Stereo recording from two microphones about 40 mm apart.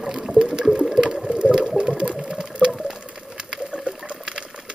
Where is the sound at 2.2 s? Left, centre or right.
Centre.